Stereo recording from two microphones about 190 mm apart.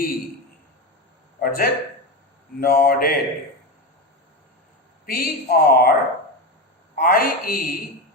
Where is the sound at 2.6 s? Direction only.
50° left (ahead or behind).